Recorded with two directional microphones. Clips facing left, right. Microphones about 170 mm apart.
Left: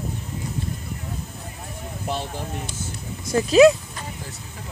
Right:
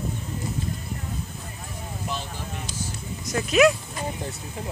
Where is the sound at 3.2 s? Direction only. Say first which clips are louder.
Left 6 dB; 30° left (ahead or behind).